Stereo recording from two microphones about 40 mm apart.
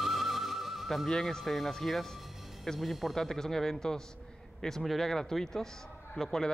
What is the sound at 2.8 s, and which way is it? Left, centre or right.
Speech, centre.